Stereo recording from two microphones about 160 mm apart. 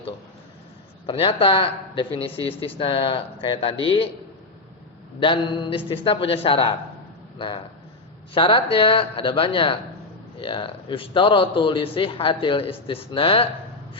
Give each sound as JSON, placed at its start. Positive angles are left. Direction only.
{"t": 1.0, "sound": "a man's voice", "side_deg": 35}
{"t": 5.2, "sound": "a man's voice", "side_deg": 30}